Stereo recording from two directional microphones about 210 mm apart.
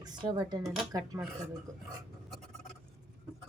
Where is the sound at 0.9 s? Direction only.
15° right (ahead or behind).